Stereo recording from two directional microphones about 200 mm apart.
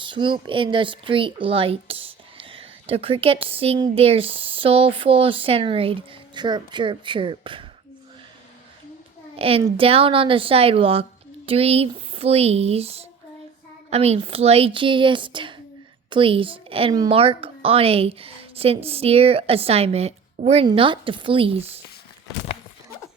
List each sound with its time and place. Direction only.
0.0 s speech: 25° right (ahead or behind)
9.3 s speech: 30° right (ahead or behind)